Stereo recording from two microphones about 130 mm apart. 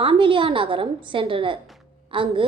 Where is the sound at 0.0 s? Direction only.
40° right (ahead or behind).